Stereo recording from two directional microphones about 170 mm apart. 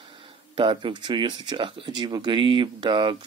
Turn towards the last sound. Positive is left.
turn(degrees=-25)  # may be behind; listen again after turning